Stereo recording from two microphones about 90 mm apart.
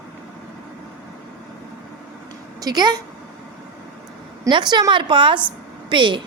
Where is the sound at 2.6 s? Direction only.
50° right (ahead or behind).